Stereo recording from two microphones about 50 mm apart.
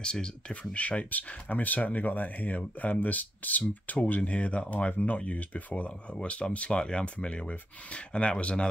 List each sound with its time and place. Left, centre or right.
0.0 s speech: centre